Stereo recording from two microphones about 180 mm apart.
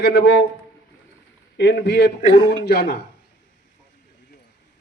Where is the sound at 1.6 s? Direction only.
65° left (ahead or behind).